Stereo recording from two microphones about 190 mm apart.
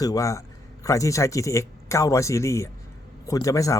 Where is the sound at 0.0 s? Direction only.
15° left (ahead or behind).